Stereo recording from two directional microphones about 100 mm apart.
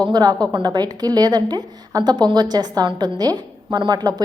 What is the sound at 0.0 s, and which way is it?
A woman's voice, 45° right (ahead or behind).